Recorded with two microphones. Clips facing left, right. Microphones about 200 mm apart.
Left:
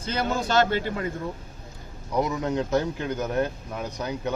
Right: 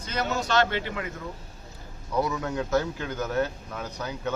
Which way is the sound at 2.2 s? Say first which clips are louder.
Left 2 dB; 20° left (ahead or behind).